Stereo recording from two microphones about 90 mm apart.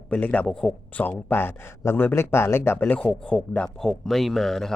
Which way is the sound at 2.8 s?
15° left (ahead or behind).